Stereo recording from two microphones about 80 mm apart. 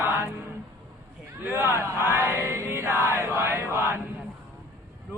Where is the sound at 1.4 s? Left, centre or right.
Right.